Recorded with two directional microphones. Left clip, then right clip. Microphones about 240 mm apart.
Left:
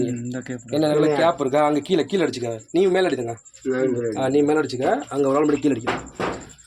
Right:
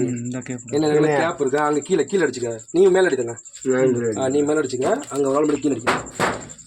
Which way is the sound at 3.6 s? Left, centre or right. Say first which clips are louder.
Right 4 dB; right.